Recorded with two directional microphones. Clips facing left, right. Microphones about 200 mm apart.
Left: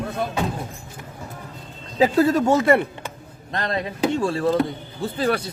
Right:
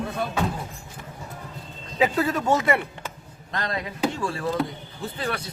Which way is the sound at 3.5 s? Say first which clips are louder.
Left 4 dB; 25° left (ahead or behind).